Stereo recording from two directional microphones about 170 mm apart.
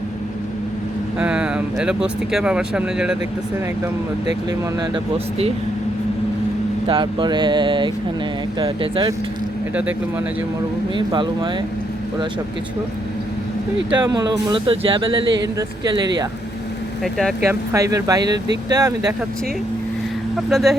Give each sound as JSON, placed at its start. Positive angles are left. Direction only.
{"t": 1.2, "sound": "speech", "side_deg": -5}
{"t": 6.8, "sound": "speech", "side_deg": -30}
{"t": 10.9, "sound": "speech", "side_deg": -25}
{"t": 13.9, "sound": "speech", "side_deg": -25}
{"t": 17.0, "sound": "speech", "side_deg": 5}
{"t": 17.5, "sound": "speech", "side_deg": -15}
{"t": 20.3, "sound": "speech", "side_deg": 0}